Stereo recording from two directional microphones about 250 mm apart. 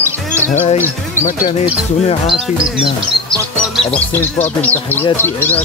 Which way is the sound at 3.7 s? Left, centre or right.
Centre.